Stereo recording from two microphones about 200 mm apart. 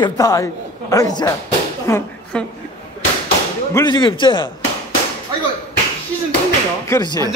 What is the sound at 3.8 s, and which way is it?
Speech, 20° left (ahead or behind).